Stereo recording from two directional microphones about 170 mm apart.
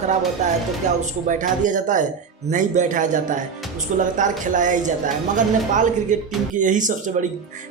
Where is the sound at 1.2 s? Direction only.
50° right (ahead or behind).